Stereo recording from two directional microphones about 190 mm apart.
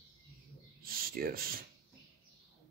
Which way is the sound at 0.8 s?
50° right (ahead or behind).